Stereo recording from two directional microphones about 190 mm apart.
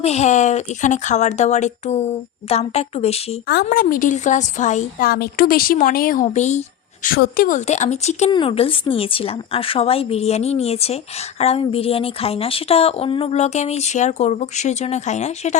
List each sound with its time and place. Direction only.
0.0 s speech: 35° left (ahead or behind)
3.5 s a woman's voice: 50° left (ahead or behind)
5.0 s a woman's voice: 55° left (ahead or behind); by 15.5 s 35° left (ahead or behind)